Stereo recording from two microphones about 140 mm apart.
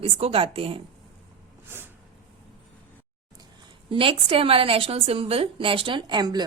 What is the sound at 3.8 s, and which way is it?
A woman's voice, 40° right (ahead or behind).